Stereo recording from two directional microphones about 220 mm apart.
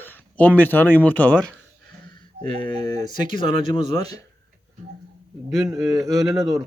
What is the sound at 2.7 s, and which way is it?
Speech, 20° left (ahead or behind).